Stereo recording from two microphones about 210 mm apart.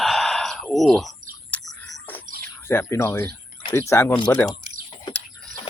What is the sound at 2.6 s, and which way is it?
Speech, 10° left (ahead or behind).